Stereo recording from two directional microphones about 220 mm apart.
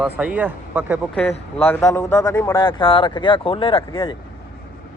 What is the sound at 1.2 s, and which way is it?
Speech, 30° left (ahead or behind).